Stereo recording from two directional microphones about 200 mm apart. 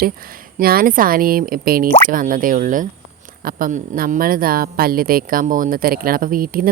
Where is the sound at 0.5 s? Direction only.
45° right (ahead or behind).